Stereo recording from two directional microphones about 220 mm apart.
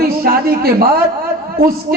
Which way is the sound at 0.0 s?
45° right (ahead or behind).